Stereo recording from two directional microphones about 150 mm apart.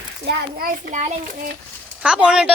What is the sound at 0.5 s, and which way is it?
Speech, 65° right (ahead or behind).